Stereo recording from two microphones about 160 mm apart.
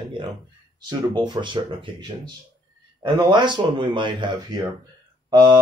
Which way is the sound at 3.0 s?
30° right (ahead or behind).